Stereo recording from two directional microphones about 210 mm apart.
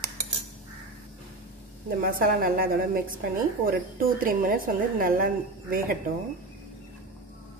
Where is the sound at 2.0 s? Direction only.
45° right (ahead or behind).